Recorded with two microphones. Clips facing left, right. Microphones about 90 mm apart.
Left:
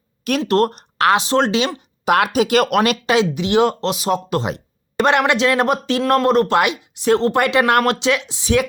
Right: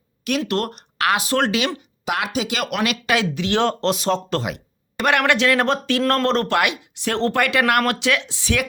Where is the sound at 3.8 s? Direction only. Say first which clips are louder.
Left 1 dB; 5° left (ahead or behind).